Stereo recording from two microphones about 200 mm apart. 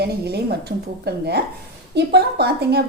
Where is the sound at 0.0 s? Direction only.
55° right (ahead or behind).